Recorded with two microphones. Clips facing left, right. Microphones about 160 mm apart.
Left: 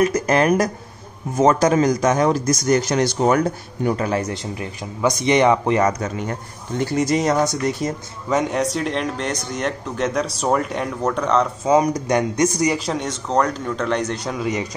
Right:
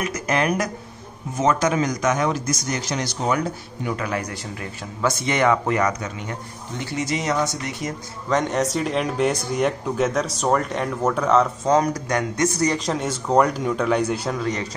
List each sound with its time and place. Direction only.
0.0 s speech: 35° left (ahead or behind)
8.3 s speech: centre (ahead or behind)
11.6 s speech: 10° left (ahead or behind)
12.7 s a man's voice: centre (ahead or behind)
14.4 s speech: 10° left (ahead or behind)